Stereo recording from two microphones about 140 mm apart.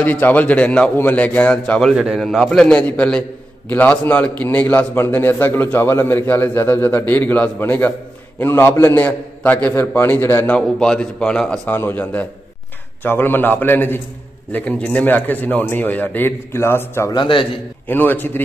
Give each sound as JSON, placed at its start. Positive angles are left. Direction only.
{"t": 0.0, "sound": "a man's voice", "side_deg": 10}
{"t": 17.1, "sound": "a man's voice", "side_deg": 35}
{"t": 17.8, "sound": "a man's voice", "side_deg": 15}